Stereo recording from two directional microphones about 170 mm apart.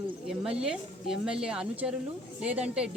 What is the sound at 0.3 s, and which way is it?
A woman's voice, 5° right (ahead or behind).